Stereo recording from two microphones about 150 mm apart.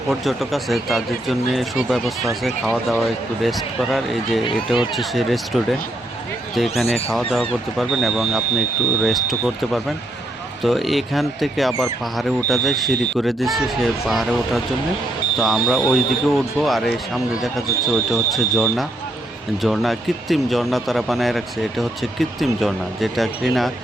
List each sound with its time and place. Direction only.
0.1 s speech: centre (ahead or behind)
4.4 s speech: 35° left (ahead or behind)
4.9 s speech: centre (ahead or behind)
6.9 s speech: centre (ahead or behind)
10.6 s speech: centre (ahead or behind)